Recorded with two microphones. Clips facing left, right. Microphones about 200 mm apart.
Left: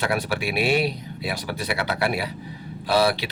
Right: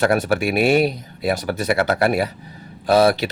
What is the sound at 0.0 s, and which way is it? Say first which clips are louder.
Speech: right 7 dB; 45° right (ahead or behind).